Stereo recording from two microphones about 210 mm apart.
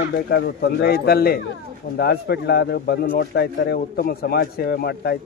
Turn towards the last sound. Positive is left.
turn(degrees=50)  # may be behind; listen again after turning